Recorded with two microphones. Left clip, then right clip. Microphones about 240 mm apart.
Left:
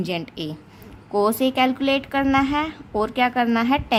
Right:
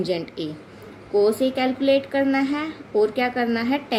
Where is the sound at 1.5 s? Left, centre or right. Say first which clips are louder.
Even; left.